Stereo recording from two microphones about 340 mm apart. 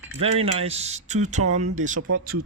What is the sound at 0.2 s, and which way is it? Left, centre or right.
Speech, centre.